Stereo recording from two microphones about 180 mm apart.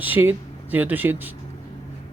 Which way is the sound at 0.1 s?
10° right (ahead or behind).